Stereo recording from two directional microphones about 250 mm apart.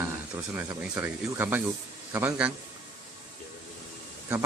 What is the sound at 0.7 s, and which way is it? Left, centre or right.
Speech, centre.